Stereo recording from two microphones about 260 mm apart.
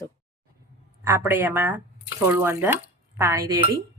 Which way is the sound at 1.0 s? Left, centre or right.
Centre.